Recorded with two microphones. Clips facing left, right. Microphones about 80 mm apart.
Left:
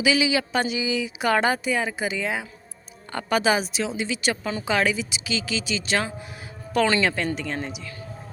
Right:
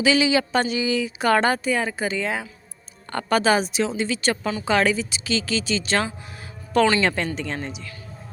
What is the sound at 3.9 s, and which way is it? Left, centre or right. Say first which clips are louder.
A woman's voice: right 2 dB; centre.